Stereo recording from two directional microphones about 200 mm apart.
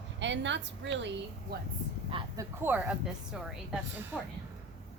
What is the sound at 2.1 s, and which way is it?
Speech, 25° right (ahead or behind).